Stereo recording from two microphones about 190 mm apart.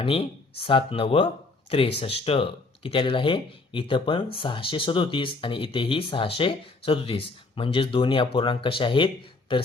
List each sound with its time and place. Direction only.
0.0 s speech: 30° left (ahead or behind)